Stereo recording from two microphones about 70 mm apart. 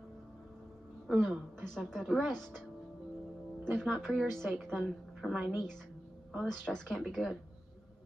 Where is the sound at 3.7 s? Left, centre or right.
Centre.